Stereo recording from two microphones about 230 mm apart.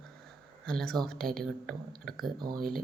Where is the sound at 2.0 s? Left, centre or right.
Centre.